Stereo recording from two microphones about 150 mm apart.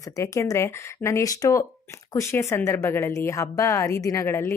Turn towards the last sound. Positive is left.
turn(degrees=15)  # may be behind; listen again after turning